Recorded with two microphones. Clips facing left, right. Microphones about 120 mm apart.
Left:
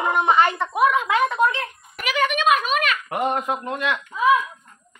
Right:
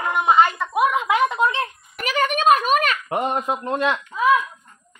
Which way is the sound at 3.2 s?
25° right (ahead or behind).